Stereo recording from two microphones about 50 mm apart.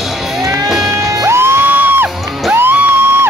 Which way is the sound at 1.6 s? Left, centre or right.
Right.